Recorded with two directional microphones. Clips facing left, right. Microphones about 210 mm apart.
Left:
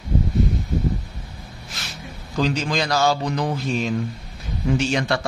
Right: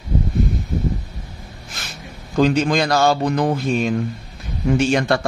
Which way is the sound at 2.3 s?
55° right (ahead or behind).